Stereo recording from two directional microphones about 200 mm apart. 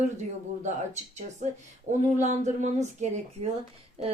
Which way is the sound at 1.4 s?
35° right (ahead or behind).